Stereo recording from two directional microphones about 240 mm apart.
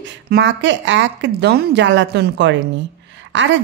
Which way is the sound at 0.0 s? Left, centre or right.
Right.